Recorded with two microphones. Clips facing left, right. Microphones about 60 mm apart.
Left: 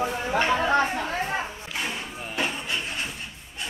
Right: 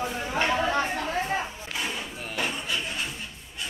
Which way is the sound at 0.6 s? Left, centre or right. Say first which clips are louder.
Left 3 dB; left.